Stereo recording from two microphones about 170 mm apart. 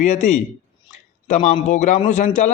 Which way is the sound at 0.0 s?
45° left (ahead or behind).